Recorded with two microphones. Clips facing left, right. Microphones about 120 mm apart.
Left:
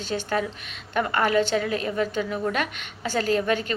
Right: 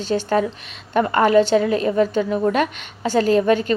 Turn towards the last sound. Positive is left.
turn(degrees=-40)  # may be behind; listen again after turning